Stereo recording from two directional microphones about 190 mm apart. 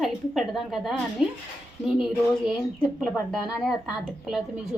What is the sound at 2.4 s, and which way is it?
A woman's voice, centre (ahead or behind).